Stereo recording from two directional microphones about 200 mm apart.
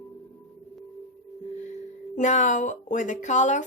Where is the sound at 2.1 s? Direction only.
35° left (ahead or behind).